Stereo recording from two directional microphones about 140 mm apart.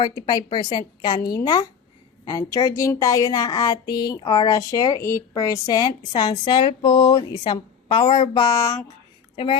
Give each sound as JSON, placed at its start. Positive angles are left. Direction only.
{"t": 0.0, "sound": "a woman's voice", "side_deg": 30}
{"t": 2.2, "sound": "speech", "side_deg": 25}
{"t": 9.3, "sound": "a woman's voice", "side_deg": 35}